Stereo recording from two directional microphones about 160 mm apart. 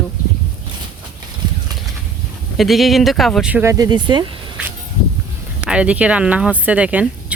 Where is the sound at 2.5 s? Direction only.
Centre (ahead or behind).